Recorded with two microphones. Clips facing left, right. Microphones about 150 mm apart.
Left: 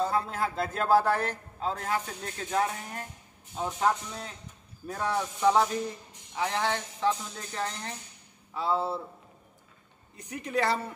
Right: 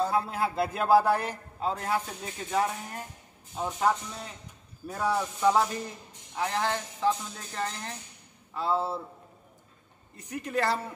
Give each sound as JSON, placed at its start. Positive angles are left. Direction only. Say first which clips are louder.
{"t": 0.0, "sound": "a man's voice", "louder": "right 1 dB", "side_deg": -5}
{"t": 10.1, "sound": "speech", "louder": "even", "side_deg": 0}